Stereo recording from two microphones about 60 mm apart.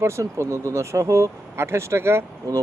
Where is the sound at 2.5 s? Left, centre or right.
Right.